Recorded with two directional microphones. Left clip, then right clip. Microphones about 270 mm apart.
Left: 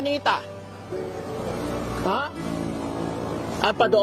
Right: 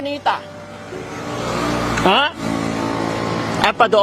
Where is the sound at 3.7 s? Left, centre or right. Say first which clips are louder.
Right 5 dB; centre.